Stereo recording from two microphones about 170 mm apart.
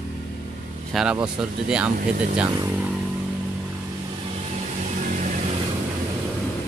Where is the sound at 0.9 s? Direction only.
5° right (ahead or behind).